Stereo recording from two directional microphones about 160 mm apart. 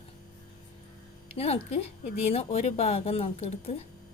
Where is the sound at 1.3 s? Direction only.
40° left (ahead or behind).